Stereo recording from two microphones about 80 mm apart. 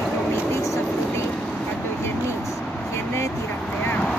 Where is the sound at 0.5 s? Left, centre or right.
Left.